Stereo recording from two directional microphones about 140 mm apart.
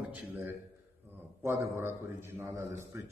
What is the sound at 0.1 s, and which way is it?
A man's voice, 15° right (ahead or behind).